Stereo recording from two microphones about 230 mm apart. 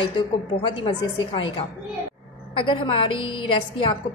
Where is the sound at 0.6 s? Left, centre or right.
Centre.